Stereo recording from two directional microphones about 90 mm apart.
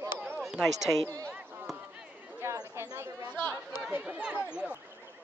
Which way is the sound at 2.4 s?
35° right (ahead or behind).